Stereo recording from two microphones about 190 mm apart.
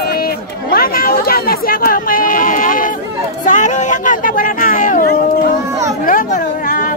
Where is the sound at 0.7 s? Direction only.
50° left (ahead or behind).